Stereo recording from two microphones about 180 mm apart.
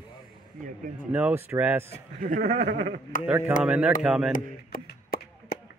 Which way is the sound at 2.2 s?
50° right (ahead or behind).